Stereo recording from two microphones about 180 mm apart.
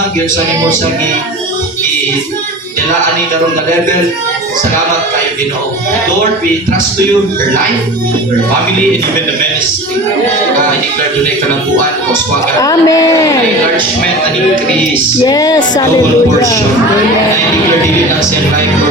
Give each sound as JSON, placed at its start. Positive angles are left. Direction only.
{"t": 12.5, "sound": "a man's voice", "side_deg": 15}
{"t": 15.2, "sound": "music", "side_deg": 20}